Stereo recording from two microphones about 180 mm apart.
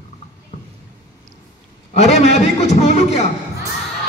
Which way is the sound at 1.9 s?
40° left (ahead or behind).